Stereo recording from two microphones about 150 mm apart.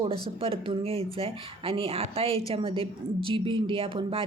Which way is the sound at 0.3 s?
40° right (ahead or behind).